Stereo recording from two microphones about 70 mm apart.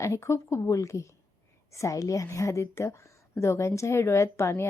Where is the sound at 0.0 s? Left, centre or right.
Left.